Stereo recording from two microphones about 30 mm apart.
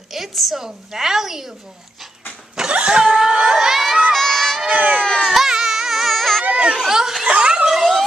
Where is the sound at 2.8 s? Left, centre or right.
Right.